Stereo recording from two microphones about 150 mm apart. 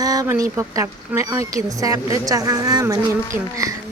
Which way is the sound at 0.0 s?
25° right (ahead or behind).